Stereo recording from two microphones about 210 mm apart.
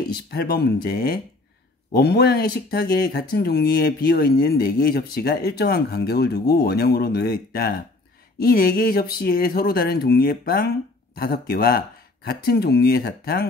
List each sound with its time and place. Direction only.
0.1 s speech: 50° left (ahead or behind)